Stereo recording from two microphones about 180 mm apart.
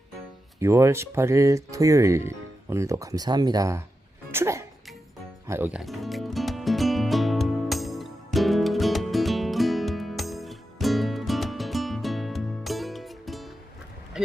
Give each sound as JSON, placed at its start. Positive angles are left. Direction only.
{"t": 0.6, "sound": "speech", "side_deg": -15}
{"t": 4.3, "sound": "music", "side_deg": -15}
{"t": 5.5, "sound": "speech", "side_deg": -10}
{"t": 5.8, "sound": "music", "side_deg": 0}